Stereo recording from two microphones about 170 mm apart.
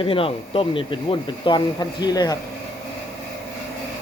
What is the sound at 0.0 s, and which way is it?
Speech, 30° left (ahead or behind).